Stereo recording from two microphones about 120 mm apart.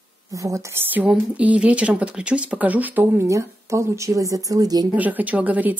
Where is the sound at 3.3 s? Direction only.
25° right (ahead or behind).